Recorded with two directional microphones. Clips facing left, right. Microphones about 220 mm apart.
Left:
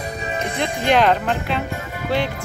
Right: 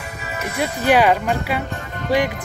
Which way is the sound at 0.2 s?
35° left (ahead or behind).